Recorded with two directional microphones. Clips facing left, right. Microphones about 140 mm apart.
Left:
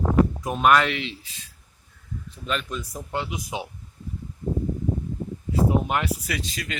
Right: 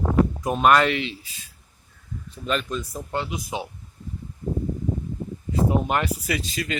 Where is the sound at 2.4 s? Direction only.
Centre (ahead or behind).